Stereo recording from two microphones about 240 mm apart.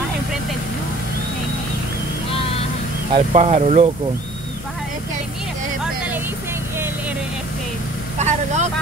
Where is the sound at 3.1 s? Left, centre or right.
Right.